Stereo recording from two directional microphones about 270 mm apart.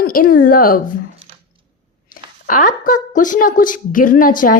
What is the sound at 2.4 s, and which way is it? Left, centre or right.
A woman's voice, left.